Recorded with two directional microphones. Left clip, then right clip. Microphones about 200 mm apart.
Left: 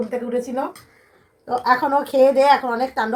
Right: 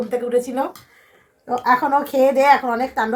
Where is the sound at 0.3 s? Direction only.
55° right (ahead or behind).